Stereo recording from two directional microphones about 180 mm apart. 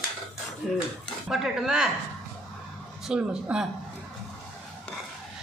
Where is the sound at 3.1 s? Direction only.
5° right (ahead or behind).